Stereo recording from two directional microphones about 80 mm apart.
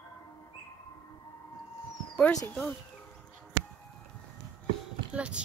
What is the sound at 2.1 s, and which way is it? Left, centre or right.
Speech, centre.